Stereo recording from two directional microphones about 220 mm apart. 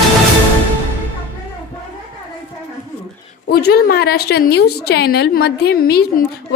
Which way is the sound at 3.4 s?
45° left (ahead or behind).